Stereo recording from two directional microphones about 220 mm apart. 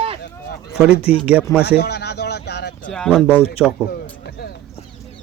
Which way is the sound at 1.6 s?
45° left (ahead or behind).